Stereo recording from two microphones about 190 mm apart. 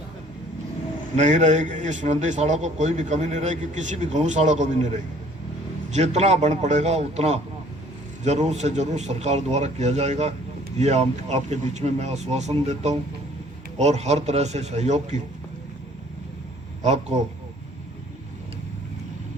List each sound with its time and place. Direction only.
1.1 s a man's voice: 40° right (ahead or behind)
5.9 s a man's voice: 35° right (ahead or behind)
16.8 s a man's voice: 35° right (ahead or behind)